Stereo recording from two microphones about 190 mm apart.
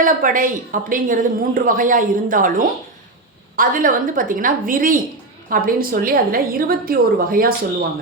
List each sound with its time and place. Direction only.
0.0 s a woman's voice: 45° right (ahead or behind)